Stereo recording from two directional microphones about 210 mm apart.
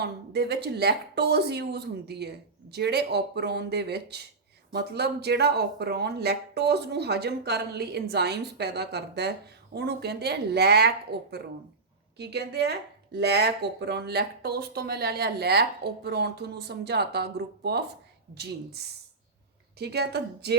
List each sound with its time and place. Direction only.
0.0 s speech: 50° right (ahead or behind)